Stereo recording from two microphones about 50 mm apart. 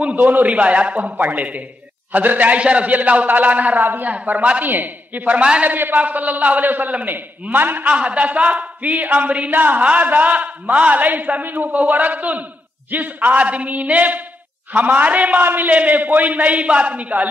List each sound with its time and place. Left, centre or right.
0.0 s a man's voice: right
4.1 s a man's voice: right
5.4 s a man's voice: centre
5.7 s a man's voice: right
7.9 s a man's voice: right